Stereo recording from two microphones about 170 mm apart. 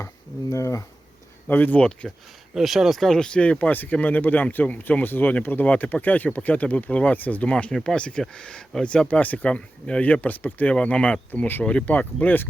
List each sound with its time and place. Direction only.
0.5 s speech: 20° left (ahead or behind)